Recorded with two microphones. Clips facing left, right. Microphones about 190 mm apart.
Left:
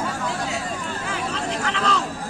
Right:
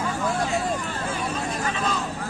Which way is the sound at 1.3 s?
85° left.